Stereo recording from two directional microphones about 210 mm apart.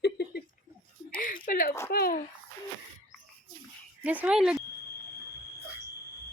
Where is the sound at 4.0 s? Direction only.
5° right (ahead or behind).